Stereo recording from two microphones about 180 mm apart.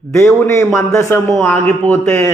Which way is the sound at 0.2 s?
15° left (ahead or behind).